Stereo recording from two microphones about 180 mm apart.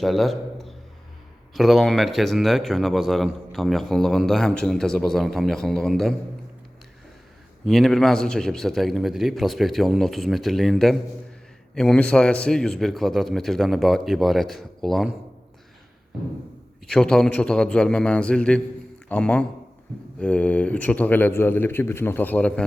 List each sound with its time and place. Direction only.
0.0 s a sound: centre (ahead or behind)
1.5 s a man's voice: centre (ahead or behind)
7.6 s a man's voice: centre (ahead or behind)
16.8 s a man's voice: 5° left (ahead or behind)